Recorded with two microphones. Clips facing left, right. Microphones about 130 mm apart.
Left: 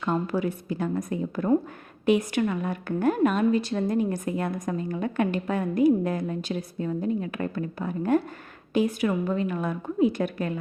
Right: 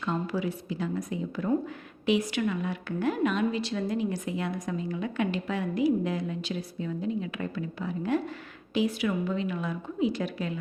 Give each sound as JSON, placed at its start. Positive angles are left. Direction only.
{"t": 0.0, "sound": "speech", "side_deg": 50}